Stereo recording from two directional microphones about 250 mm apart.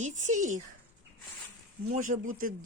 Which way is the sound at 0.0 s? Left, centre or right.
Right.